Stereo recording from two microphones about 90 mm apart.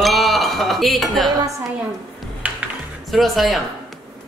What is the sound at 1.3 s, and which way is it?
Speech, 40° right (ahead or behind).